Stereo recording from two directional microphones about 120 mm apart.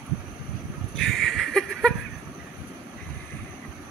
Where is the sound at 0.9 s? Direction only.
5° left (ahead or behind).